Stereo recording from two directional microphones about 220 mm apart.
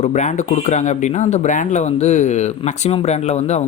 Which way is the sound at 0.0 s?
30° left (ahead or behind).